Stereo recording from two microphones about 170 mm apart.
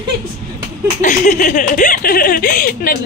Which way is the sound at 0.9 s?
50° left (ahead or behind).